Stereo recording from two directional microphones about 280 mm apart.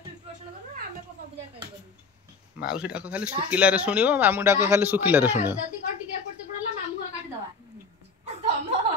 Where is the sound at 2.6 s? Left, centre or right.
Centre.